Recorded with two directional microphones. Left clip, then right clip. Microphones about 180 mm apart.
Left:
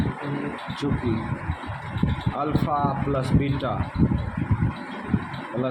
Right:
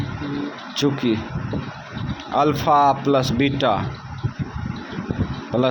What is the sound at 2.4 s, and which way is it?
Speech, 40° right (ahead or behind).